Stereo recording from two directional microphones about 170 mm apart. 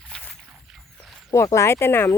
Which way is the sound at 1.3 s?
20° left (ahead or behind).